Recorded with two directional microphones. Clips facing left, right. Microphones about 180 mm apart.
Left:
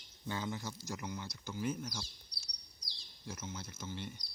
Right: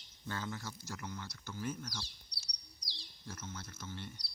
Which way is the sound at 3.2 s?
10° left (ahead or behind).